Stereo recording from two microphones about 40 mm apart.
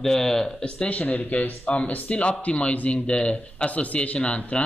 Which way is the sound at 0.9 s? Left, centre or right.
Left.